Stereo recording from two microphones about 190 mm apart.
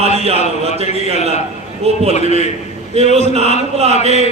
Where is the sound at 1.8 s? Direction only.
35° right (ahead or behind).